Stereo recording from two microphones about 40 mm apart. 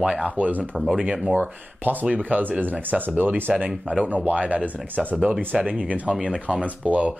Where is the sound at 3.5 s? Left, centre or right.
Right.